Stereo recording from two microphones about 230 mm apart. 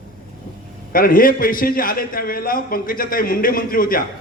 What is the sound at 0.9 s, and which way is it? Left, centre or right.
A man's voice, left.